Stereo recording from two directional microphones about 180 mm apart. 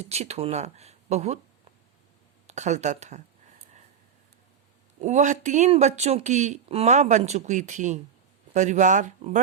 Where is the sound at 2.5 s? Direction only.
40° right (ahead or behind).